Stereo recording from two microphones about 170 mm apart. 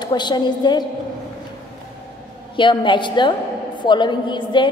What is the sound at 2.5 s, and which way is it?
A woman's voice, 30° left (ahead or behind).